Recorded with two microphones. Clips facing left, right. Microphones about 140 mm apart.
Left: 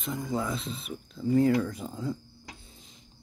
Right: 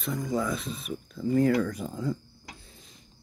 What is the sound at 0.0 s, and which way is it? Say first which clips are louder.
Speech: right 2 dB; 25° left (ahead or behind).